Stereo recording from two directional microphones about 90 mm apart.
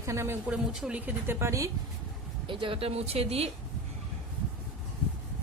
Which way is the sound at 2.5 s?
75° right (ahead or behind).